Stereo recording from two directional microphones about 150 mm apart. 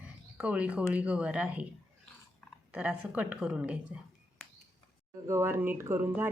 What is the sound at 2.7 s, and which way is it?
Speech, 10° right (ahead or behind).